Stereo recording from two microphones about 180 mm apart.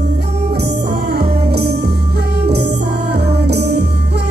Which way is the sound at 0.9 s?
65° right (ahead or behind).